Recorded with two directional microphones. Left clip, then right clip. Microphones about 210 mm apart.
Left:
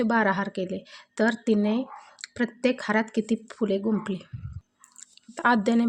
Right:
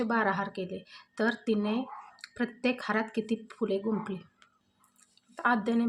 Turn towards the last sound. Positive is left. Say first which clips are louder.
# left 5 dB
turn(degrees=35)  # may be behind; listen again after turning